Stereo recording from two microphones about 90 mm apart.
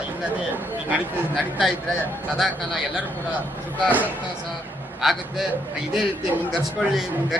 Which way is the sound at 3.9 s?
20° right (ahead or behind).